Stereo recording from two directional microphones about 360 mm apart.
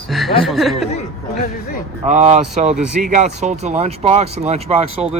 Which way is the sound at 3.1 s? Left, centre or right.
Centre.